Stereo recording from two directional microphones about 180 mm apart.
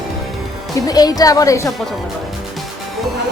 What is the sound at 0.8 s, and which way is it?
Speech, 20° left (ahead or behind).